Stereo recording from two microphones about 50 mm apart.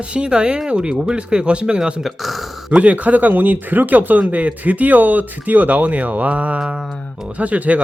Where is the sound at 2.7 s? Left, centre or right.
Right.